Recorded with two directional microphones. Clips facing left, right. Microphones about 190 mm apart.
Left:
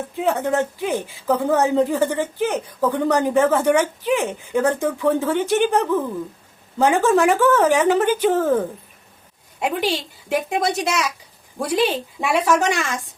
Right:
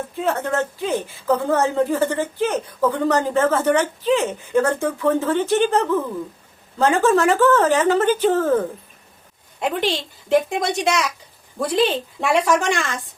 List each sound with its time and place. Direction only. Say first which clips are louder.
0.2 s speech: left 2 dB; 15° left (ahead or behind)